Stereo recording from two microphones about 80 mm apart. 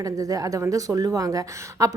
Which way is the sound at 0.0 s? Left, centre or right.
Right.